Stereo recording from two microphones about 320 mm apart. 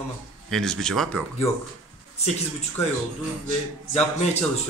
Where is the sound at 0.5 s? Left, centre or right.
Centre.